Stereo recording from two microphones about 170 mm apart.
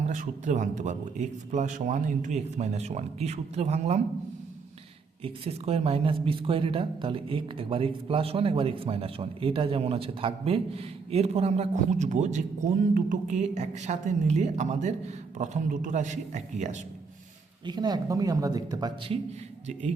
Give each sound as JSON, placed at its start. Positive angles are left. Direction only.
{"t": 0.1, "sound": "speech", "side_deg": -45}
{"t": 5.2, "sound": "speech", "side_deg": -35}
{"t": 17.7, "sound": "speech", "side_deg": -25}